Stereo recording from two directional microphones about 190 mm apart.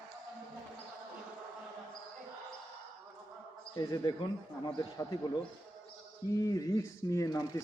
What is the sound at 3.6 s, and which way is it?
A man's voice, 20° left (ahead or behind).